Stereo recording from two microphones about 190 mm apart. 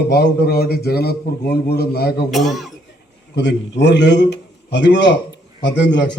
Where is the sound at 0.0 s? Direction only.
60° left (ahead or behind).